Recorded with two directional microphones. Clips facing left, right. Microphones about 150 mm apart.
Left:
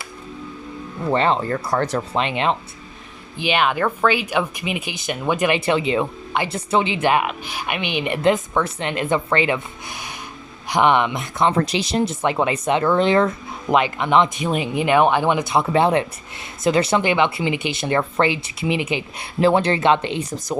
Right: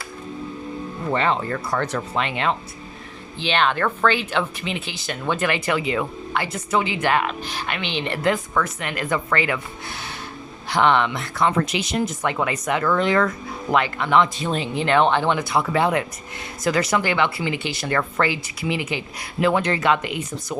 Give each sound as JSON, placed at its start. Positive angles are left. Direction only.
{"t": 1.1, "sound": "speech", "side_deg": 30}
{"t": 2.1, "sound": "speech", "side_deg": 20}
{"t": 3.4, "sound": "speech", "side_deg": 10}
{"t": 11.5, "sound": "speech", "side_deg": 35}